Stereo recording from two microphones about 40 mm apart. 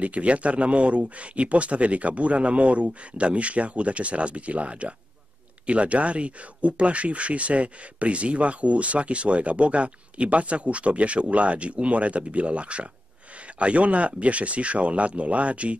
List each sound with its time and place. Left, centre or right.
0.0 s speech: right